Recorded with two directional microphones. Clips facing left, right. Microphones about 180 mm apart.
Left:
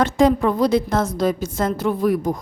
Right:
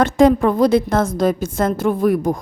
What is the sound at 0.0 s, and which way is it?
A woman's voice, 50° right (ahead or behind).